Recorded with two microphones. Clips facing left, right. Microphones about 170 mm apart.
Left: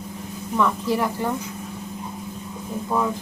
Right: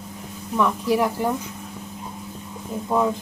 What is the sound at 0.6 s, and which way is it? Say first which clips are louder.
Speech: right 2 dB; 10° right (ahead or behind).